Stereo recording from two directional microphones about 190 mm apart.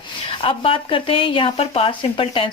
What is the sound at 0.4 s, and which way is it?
A woman's voice, 30° left (ahead or behind).